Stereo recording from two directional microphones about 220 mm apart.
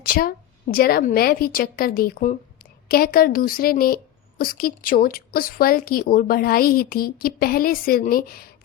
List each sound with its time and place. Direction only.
0.0 s a woman's voice: 40° left (ahead or behind)